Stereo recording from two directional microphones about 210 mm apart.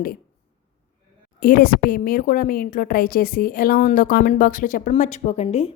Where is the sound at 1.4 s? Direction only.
40° left (ahead or behind).